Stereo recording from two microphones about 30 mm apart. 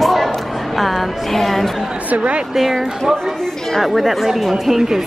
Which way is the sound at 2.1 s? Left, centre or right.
Right.